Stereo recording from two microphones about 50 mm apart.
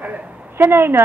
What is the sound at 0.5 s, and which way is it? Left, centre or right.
Speech, right.